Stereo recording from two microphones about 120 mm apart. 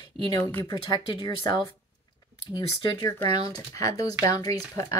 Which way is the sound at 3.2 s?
60° right (ahead or behind).